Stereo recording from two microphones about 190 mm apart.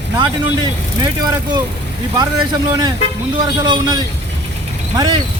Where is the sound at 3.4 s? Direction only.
20° right (ahead or behind).